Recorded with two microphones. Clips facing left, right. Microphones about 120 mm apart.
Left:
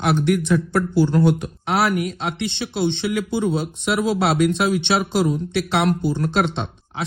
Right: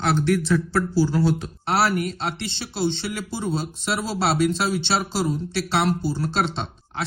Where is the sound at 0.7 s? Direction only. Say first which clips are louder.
Left 3 dB; 55° left (ahead or behind).